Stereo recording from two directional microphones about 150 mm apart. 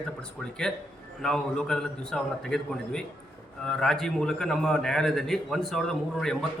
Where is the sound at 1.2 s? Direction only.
5° left (ahead or behind).